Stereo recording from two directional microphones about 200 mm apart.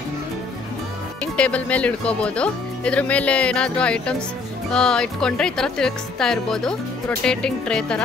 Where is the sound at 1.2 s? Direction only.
5° left (ahead or behind).